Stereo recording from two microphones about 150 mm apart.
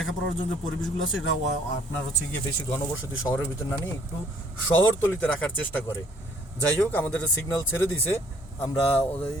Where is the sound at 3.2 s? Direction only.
15° left (ahead or behind).